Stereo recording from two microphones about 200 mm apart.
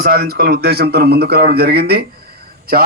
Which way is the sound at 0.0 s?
50° right (ahead or behind).